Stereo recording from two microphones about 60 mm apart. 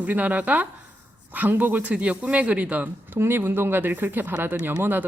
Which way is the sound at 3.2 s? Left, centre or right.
Right.